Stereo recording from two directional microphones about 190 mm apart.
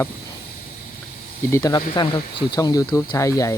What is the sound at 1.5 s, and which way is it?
Speech, 15° left (ahead or behind).